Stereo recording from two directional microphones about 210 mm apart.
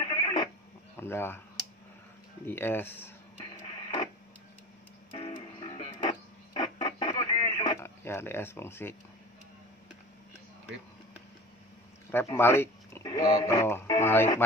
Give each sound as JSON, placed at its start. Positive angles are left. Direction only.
{"t": 0.0, "sound": "a sound", "side_deg": 25}
{"t": 0.9, "sound": "speech", "side_deg": 10}
{"t": 2.4, "sound": "speech", "side_deg": 10}
{"t": 3.3, "sound": "music", "side_deg": 25}
{"t": 5.1, "sound": "music", "side_deg": 25}
{"t": 6.0, "sound": "radio", "side_deg": 20}
{"t": 7.8, "sound": "speech", "side_deg": 10}
{"t": 12.1, "sound": "speech", "side_deg": 10}